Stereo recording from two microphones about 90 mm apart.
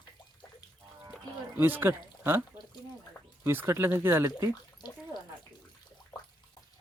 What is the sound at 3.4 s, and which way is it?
Speech, 30° right (ahead or behind).